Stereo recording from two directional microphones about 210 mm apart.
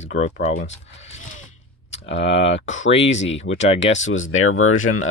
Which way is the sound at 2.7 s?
65° left (ahead or behind).